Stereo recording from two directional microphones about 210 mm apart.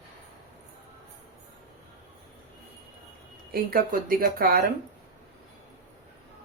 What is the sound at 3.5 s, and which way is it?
Speech, 45° right (ahead or behind).